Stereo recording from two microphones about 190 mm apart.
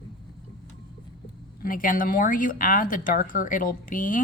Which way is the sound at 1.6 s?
45° left (ahead or behind).